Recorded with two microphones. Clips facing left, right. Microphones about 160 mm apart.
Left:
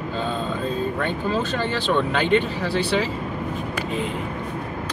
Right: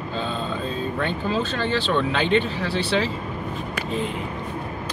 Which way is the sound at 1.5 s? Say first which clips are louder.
Left 1 dB; 10° left (ahead or behind).